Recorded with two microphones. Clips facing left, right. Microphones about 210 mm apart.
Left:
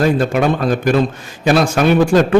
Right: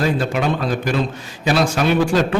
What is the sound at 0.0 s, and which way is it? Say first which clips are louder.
Speech: left 5 dB; 50° left (ahead or behind).